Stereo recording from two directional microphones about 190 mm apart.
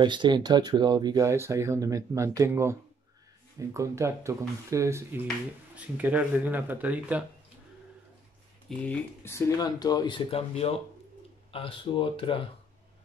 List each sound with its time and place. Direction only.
0.0 s speech: 25° right (ahead or behind); by 7.2 s 10° right (ahead or behind)
8.6 s speech: 5° left (ahead or behind); by 12.4 s 25° left (ahead or behind)